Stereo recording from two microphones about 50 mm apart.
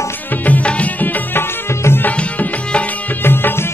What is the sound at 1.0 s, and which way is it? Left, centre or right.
Music, left.